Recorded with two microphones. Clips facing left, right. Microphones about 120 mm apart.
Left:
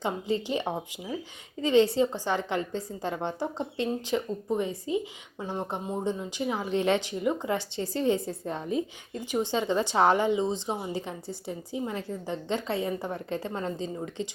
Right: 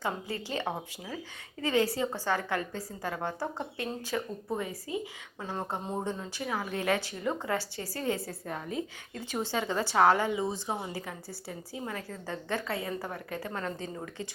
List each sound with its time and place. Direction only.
0.0 s a woman's voice: 20° left (ahead or behind)